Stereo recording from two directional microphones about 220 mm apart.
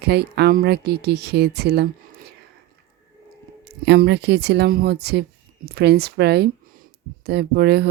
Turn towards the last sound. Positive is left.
turn(degrees=-50)  # may be behind; listen again after turning